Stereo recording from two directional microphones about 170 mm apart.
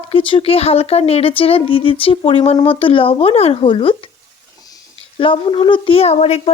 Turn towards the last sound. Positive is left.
turn(degrees=40)  # may be behind; listen again after turning